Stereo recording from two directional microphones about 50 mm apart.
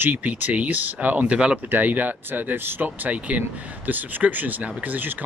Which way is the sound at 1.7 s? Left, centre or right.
Right.